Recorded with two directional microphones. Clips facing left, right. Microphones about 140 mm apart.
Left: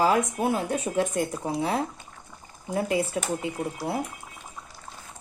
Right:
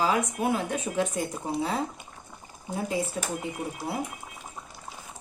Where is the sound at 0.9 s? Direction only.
50° left (ahead or behind).